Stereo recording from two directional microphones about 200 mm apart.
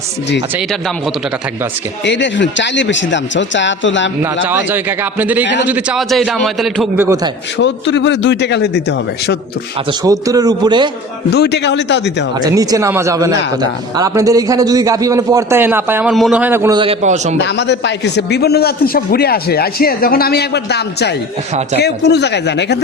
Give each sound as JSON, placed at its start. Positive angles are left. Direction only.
{"t": 2.0, "sound": "a man's voice", "side_deg": 65}
{"t": 4.4, "sound": "a man's voice", "side_deg": -10}
{"t": 6.9, "sound": "a man's voice", "side_deg": -15}
{"t": 7.6, "sound": "a man's voice", "side_deg": 60}
{"t": 10.0, "sound": "a man's voice", "side_deg": -15}
{"t": 11.3, "sound": "a man's voice", "side_deg": 55}
{"t": 12.4, "sound": "a man's voice", "side_deg": -15}
{"t": 16.7, "sound": "a man's voice", "side_deg": -25}
{"t": 17.3, "sound": "a man's voice", "side_deg": 60}